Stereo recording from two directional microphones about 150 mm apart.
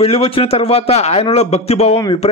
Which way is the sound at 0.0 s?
40° left (ahead or behind).